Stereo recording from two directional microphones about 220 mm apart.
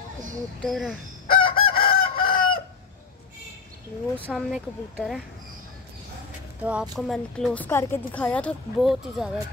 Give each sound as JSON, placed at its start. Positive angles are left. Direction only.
{"t": 0.6, "sound": "a woman's voice", "side_deg": 0}
{"t": 1.2, "sound": "chicken", "side_deg": 40}
{"t": 4.2, "sound": "a woman's voice", "side_deg": -5}
{"t": 6.6, "sound": "a woman's voice", "side_deg": -5}